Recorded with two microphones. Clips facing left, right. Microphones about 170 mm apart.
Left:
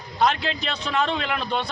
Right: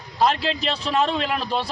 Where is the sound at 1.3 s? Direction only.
5° right (ahead or behind).